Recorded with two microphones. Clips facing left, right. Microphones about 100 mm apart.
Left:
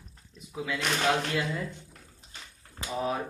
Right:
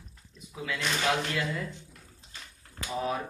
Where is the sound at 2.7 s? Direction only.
20° left (ahead or behind).